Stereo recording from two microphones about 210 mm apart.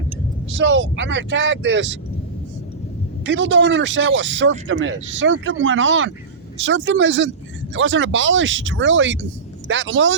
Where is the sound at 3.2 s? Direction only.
60° right (ahead or behind).